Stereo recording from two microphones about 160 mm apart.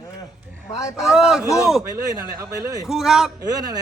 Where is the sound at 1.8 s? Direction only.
20° right (ahead or behind).